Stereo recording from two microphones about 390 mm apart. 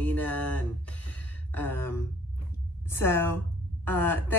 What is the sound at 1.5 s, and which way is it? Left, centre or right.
Speech, centre.